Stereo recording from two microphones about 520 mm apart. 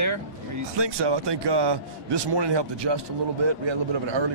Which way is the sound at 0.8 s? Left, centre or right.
Right.